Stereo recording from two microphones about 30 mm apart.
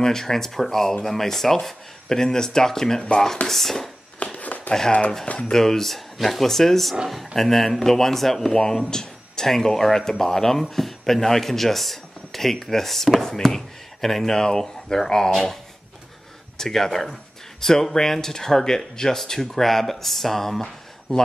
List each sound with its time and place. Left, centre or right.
0.0 s speech: centre
4.2 s a sound: left
5.4 s speech: centre
16.5 s speech: centre
21.1 s speech: centre